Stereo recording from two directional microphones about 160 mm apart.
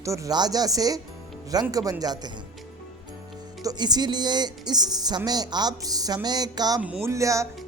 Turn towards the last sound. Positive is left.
turn(degrees=-20)  # may be behind; listen again after turning